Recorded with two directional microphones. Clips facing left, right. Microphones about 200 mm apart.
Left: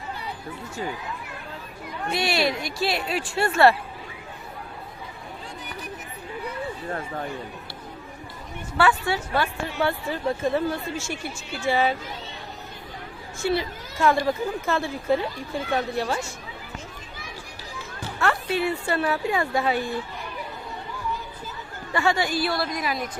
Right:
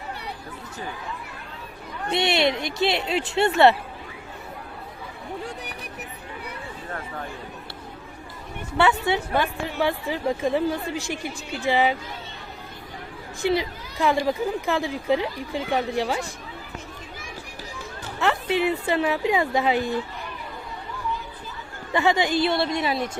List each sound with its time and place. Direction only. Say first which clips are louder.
2.0 s speech: right 2 dB; 25° right (ahead or behind)
8.8 s a woman's voice: right 1 dB; 20° right (ahead or behind)
13.4 s a woman's voice: right 2 dB; 15° right (ahead or behind)
18.2 s a woman's voice: right 2 dB; 20° right (ahead or behind)
21.9 s speech: right 3 dB; 20° right (ahead or behind)